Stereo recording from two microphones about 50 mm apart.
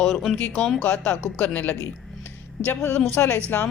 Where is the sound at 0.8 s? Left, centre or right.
Left.